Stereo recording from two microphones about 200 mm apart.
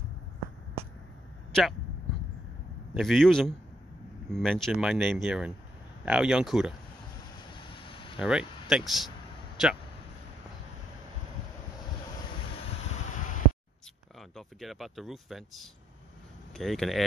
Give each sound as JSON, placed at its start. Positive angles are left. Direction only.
{"t": 1.5, "sound": "speech", "side_deg": 0}
{"t": 2.9, "sound": "speech", "side_deg": 0}
{"t": 7.5, "sound": "vehicle", "side_deg": 25}
{"t": 8.2, "sound": "speech", "side_deg": -5}
{"t": 14.3, "sound": "speech", "side_deg": 0}